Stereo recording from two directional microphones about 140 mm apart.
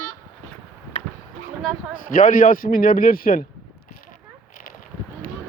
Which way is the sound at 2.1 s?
70° left (ahead or behind).